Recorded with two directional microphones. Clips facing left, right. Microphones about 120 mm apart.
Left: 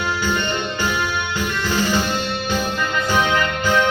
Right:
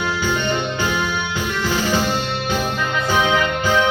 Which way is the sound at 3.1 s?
10° right (ahead or behind).